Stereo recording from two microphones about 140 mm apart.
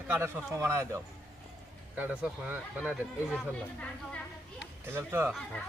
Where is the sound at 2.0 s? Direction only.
10° right (ahead or behind).